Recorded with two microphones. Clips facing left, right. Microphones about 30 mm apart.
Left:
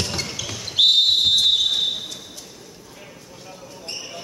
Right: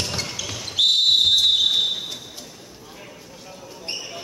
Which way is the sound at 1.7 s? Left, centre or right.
Centre.